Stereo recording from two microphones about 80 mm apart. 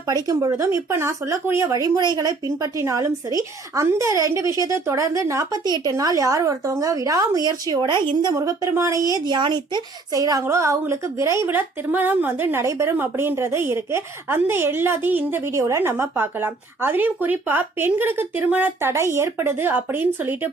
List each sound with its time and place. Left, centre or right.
0.1 s speech: right
2.0 s a woman's voice: right
8.4 s a woman's voice: right
10.1 s a woman's voice: right
10.4 s speech: right
11.4 s a woman's voice: right
12.6 s speech: right
13.0 s a woman's voice: right
18.8 s a woman's voice: right